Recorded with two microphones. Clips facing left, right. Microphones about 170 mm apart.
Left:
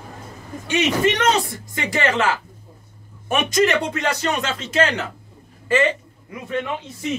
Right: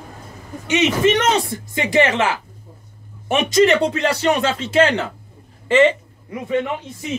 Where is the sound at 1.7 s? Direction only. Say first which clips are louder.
Right 4 dB; 25° right (ahead or behind).